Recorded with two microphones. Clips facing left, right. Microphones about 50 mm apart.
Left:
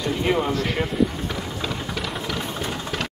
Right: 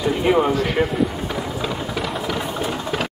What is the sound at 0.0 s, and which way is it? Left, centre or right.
Speech, centre.